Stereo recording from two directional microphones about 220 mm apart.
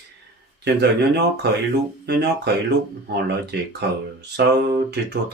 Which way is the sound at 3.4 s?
50° right (ahead or behind).